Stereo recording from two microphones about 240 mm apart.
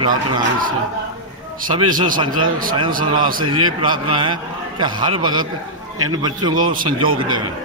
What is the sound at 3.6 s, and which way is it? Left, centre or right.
A man's voice, centre.